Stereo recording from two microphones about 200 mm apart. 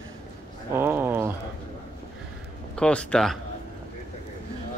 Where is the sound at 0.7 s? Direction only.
10° right (ahead or behind).